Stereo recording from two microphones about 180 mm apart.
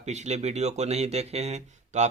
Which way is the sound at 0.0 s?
40° right (ahead or behind).